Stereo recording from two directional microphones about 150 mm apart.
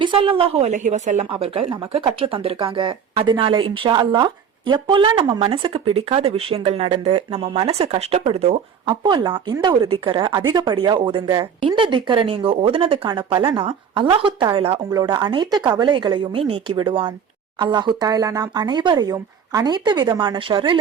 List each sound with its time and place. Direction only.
0.0 s a woman's voice: 35° right (ahead or behind); by 1.3 s 50° right (ahead or behind)
1.3 s a woman's voice: 40° right (ahead or behind)
8.9 s speech: 30° right (ahead or behind)
14.8 s speech: 30° right (ahead or behind)